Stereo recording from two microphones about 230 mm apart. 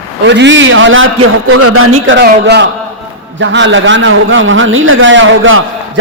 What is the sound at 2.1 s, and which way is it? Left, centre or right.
Speech, right.